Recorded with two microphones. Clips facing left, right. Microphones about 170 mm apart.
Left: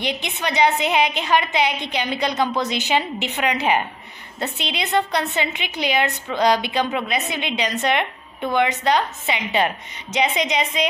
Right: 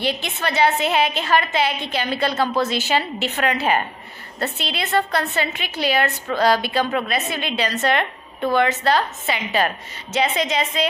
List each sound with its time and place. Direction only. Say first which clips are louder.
0.0 s a woman's voice: right 1 dB; 15° left (ahead or behind)